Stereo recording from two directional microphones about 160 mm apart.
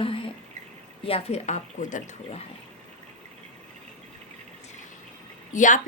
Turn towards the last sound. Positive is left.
turn(degrees=55)  # may be behind; listen again after turning